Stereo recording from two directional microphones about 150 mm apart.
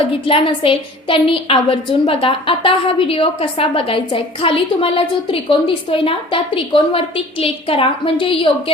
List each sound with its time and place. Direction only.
0.3 s a woman's voice: 35° left (ahead or behind)